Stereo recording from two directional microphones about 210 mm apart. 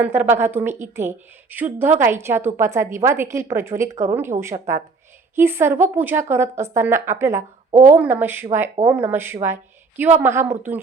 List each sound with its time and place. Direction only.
0.0 s a woman's voice: 10° right (ahead or behind)
7.7 s speech: 35° right (ahead or behind)
7.9 s a woman's voice: 10° right (ahead or behind)